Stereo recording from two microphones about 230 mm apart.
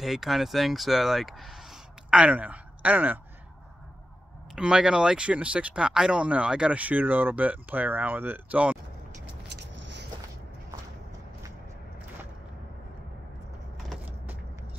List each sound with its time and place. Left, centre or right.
0.0 s speech: centre
4.6 s speech: centre
9.5 s vehicle: right